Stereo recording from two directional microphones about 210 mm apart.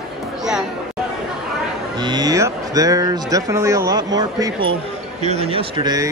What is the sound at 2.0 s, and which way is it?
Speech, 20° right (ahead or behind).